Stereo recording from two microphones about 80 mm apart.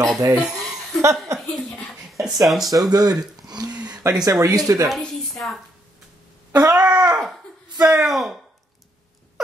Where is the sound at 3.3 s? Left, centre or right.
Right.